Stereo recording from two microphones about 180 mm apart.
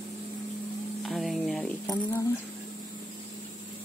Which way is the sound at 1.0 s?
Centre (ahead or behind).